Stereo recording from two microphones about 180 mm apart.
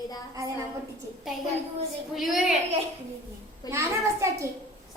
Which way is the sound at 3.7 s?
15° right (ahead or behind).